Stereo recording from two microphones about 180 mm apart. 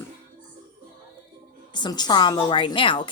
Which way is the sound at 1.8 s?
25° left (ahead or behind).